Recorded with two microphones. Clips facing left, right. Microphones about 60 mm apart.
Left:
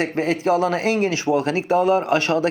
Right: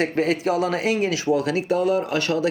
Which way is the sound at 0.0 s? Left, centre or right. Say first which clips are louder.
Even; left.